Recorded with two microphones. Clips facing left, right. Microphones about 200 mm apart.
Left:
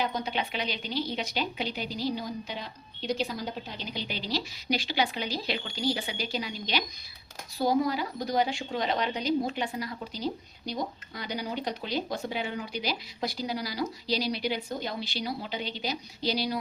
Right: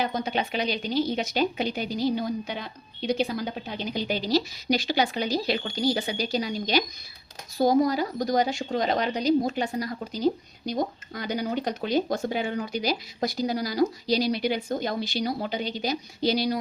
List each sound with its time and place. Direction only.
0.0 s speech: 50° right (ahead or behind)